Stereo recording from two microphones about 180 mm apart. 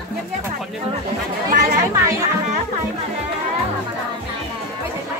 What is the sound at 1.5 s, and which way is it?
Chatter, 50° right (ahead or behind).